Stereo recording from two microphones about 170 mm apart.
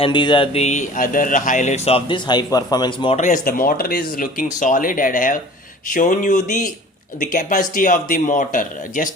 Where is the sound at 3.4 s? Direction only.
60° left (ahead or behind).